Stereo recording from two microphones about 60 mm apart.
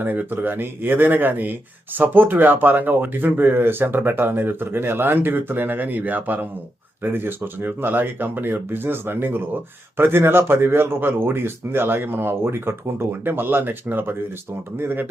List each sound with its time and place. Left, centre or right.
0.0 s speech: right